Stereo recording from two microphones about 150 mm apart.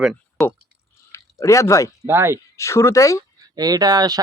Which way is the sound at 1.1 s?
20° left (ahead or behind).